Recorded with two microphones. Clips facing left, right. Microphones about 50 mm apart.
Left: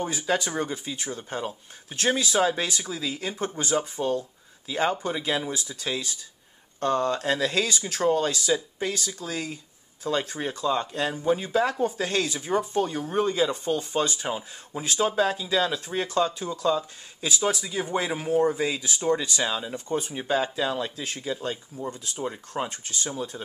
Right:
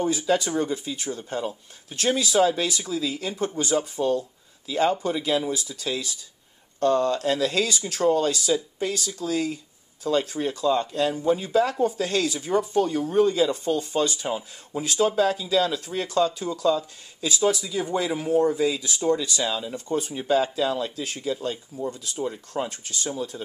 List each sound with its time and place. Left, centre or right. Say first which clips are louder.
0.0 s speech: right 3 dB; centre
19.7 s speech: right 2 dB; centre
21.8 s speech: right 3 dB; left